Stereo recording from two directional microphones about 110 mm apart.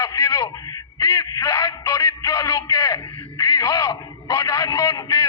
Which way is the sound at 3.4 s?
30° left (ahead or behind).